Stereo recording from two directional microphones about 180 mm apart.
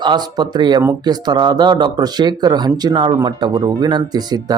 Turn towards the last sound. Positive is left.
turn(degrees=-20)  # may be behind; listen again after turning